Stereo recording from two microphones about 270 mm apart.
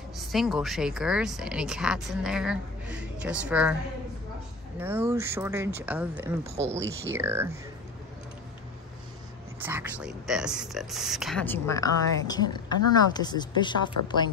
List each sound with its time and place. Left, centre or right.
0.3 s speech: centre
4.7 s speech: centre
9.6 s a woman's voice: centre